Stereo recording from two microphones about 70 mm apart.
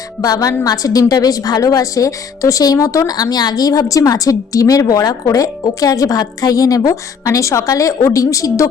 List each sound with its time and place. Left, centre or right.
0.2 s a woman's voice: left